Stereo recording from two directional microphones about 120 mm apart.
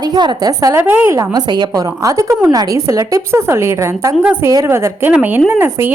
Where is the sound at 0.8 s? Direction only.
15° right (ahead or behind).